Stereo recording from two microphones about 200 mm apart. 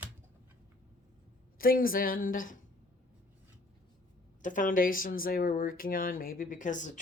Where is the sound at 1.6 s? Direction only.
45° left (ahead or behind).